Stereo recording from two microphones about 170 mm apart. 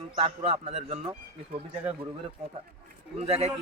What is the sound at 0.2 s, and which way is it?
Speech, 35° right (ahead or behind).